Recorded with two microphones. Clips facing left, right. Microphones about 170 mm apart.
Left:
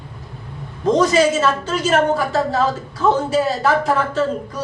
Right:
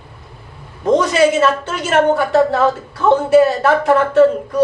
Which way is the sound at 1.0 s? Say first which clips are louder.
Even; 60° right (ahead or behind).